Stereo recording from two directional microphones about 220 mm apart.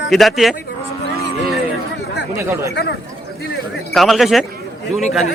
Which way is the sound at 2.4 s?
15° right (ahead or behind).